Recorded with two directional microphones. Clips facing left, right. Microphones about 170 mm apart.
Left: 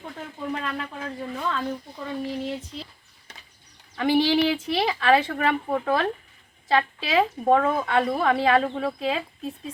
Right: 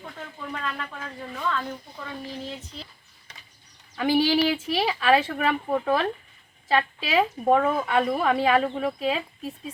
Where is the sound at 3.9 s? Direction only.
5° right (ahead or behind).